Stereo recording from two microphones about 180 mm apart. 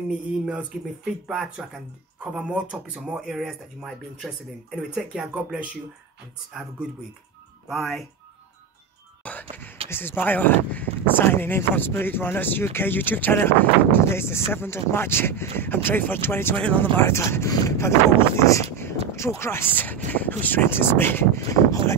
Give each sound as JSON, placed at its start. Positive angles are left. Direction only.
{"t": 0.5, "sound": "speech", "side_deg": -5}
{"t": 7.6, "sound": "speech", "side_deg": 0}
{"t": 9.2, "sound": "speech", "side_deg": 10}